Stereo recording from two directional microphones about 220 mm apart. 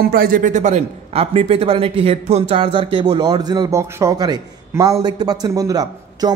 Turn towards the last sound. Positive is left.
turn(degrees=-15)  # may be behind; listen again after turning